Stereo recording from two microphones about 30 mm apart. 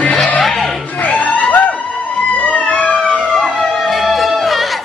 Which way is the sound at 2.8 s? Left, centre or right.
Left.